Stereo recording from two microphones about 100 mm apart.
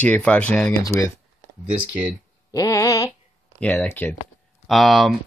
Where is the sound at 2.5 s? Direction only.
35° left (ahead or behind).